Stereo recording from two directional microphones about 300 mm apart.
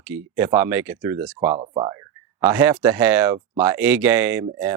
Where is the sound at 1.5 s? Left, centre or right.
Centre.